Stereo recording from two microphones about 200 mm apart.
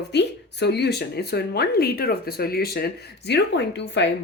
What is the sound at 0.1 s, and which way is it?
Speech, 60° left (ahead or behind).